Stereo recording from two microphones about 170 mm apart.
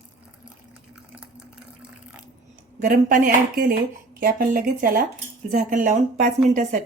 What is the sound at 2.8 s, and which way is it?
A woman's voice, 55° right (ahead or behind).